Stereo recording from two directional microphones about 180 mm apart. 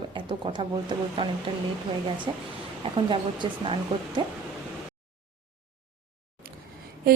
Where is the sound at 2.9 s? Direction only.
30° right (ahead or behind).